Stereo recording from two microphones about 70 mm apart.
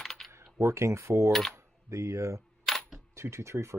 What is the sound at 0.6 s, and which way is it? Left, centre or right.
Speech, right.